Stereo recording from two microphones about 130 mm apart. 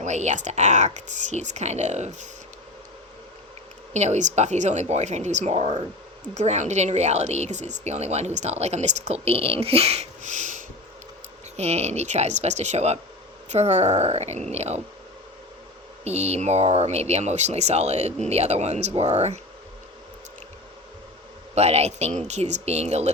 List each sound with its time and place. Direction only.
0.0 s speech: 65° right (ahead or behind)
3.9 s speech: 60° right (ahead or behind)
11.5 s speech: 55° right (ahead or behind)
16.0 s speech: 55° right (ahead or behind)
21.5 s speech: 55° right (ahead or behind)